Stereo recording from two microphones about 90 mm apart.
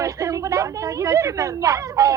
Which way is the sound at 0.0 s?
35° right (ahead or behind).